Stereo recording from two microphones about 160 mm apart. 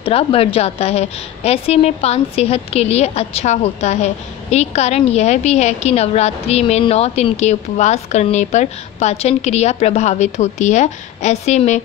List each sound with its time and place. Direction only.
0.0 s a woman's voice: 35° left (ahead or behind)